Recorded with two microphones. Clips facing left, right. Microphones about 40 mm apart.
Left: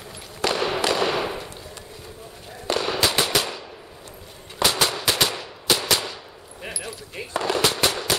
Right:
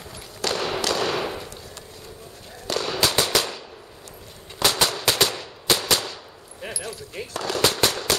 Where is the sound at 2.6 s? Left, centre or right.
Centre.